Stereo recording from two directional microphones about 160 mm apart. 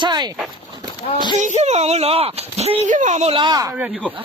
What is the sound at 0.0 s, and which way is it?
Speech, 25° right (ahead or behind).